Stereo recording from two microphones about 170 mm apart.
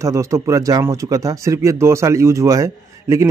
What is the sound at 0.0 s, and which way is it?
A man's voice, 20° right (ahead or behind).